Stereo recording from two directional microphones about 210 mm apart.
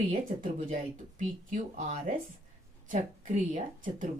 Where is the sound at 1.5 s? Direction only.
40° right (ahead or behind).